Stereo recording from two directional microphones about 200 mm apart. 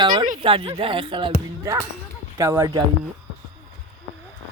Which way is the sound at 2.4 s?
15° right (ahead or behind).